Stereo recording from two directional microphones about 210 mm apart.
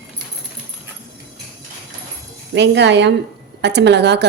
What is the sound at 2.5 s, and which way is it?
Speech, 55° right (ahead or behind).